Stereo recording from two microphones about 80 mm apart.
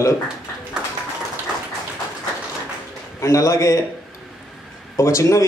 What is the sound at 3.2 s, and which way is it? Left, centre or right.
Speech, left.